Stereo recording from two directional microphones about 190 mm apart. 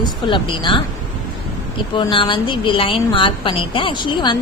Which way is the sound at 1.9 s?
25° left (ahead or behind).